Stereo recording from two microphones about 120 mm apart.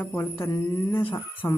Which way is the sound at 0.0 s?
15° left (ahead or behind).